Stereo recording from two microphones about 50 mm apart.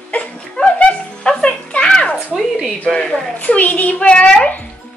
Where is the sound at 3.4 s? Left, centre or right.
Left.